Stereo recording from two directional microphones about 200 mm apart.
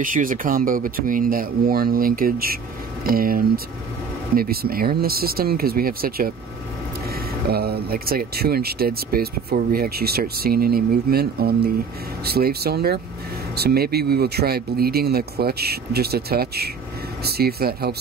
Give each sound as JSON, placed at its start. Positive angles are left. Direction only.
{"t": 0.0, "sound": "speech", "side_deg": -45}